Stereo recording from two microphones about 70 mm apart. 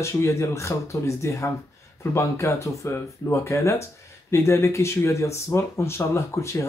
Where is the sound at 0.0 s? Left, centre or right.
Left.